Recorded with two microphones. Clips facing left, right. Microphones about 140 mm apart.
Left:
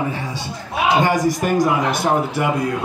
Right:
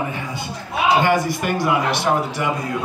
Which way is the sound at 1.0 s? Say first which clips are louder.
Left 1 dB; 40° left (ahead or behind).